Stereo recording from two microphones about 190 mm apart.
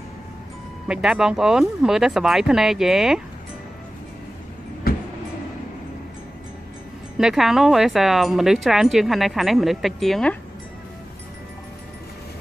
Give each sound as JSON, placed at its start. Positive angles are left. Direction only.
{"t": 0.8, "sound": "speech", "side_deg": -5}
{"t": 4.9, "sound": "vehicle", "side_deg": 50}
{"t": 7.2, "sound": "speech", "side_deg": 0}